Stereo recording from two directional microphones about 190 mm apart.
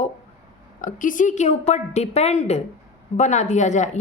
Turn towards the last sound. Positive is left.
turn(degrees=40)  # may be behind; listen again after turning